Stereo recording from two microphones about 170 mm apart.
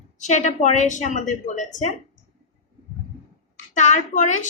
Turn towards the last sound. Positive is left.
turn(degrees=45)  # may be behind; listen again after turning